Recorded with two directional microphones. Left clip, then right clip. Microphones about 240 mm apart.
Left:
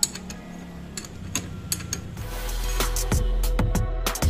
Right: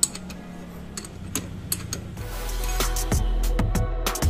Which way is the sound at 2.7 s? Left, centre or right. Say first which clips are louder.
Even; centre.